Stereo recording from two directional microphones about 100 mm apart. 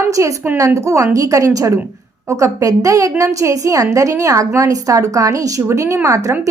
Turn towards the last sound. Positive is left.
turn(degrees=-30)  # may be behind; listen again after turning